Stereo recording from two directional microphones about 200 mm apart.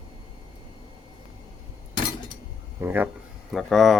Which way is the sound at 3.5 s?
Centre (ahead or behind).